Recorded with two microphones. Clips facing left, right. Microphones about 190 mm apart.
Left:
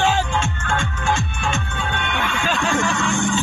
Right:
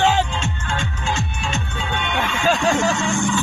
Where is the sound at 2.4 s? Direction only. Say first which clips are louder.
Right 5 dB; 45° right (ahead or behind).